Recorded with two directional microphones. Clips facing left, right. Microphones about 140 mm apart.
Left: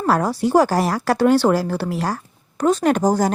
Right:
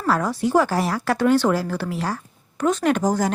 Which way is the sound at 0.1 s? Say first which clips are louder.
Left 2 dB; 35° left (ahead or behind).